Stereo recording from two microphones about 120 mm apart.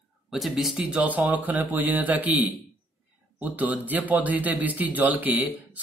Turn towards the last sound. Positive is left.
turn(degrees=-15)  # may be behind; listen again after turning